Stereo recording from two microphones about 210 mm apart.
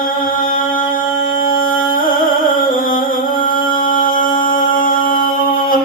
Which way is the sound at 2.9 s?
40° left (ahead or behind).